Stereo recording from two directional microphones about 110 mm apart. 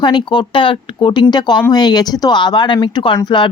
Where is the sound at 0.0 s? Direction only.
45° left (ahead or behind).